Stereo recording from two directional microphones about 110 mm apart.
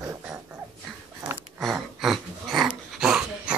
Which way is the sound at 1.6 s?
Centre (ahead or behind).